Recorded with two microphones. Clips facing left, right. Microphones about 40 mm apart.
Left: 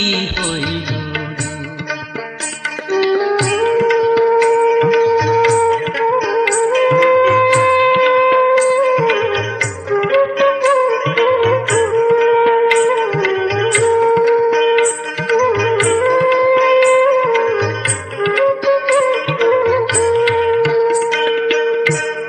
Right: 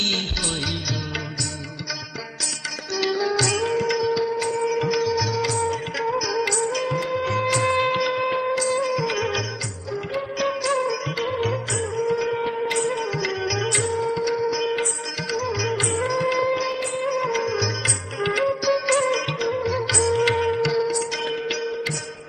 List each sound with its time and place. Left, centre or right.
2.9 s music: left
9.8 s music: left
11.1 s music: left
16.6 s music: left
17.0 s music: left
18.2 s music: left
19.4 s music: left